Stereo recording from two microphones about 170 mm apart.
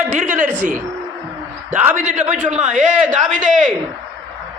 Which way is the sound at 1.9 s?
45° right (ahead or behind).